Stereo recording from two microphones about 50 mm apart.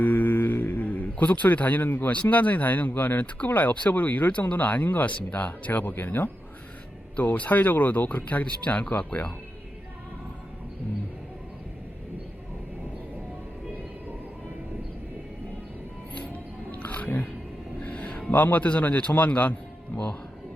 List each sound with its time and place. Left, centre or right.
0.0 s speech: left
16.1 s music: left
18.3 s a man's voice: left